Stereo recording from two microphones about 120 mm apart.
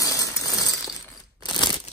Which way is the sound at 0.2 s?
25° left (ahead or behind).